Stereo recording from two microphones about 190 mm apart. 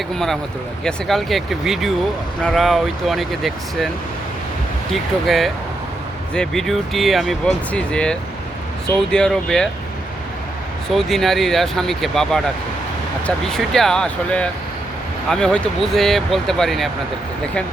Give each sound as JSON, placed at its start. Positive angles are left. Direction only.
{"t": 0.9, "sound": "speech", "side_deg": 0}
{"t": 4.9, "sound": "speech", "side_deg": 0}
{"t": 10.9, "sound": "speech", "side_deg": 0}